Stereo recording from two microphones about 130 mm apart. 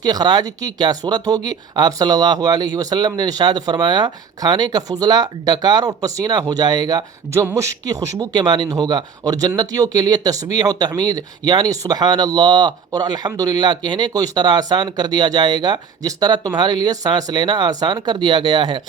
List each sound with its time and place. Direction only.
0.0 s speech: 30° right (ahead or behind)